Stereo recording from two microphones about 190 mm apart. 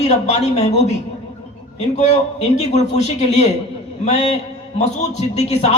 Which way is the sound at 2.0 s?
35° left (ahead or behind).